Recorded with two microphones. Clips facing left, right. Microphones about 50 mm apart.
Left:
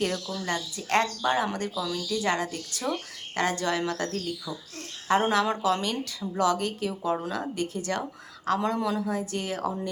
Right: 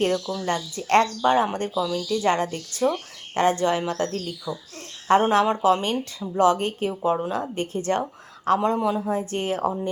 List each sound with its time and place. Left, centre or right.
0.1 s speech: right